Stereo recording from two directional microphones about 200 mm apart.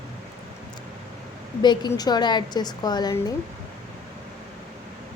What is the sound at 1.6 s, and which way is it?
A woman's voice, 20° left (ahead or behind).